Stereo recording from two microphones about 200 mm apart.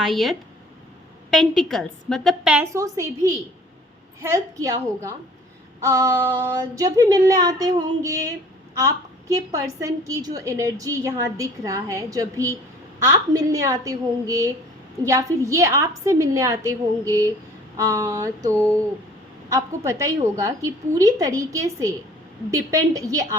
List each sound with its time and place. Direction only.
0.0 s a woman's voice: centre (ahead or behind)
2.7 s a woman's voice: 15° right (ahead or behind)
4.2 s a woman's voice: 15° right (ahead or behind)